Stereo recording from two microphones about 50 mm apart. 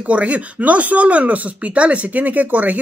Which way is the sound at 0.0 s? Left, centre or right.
Right.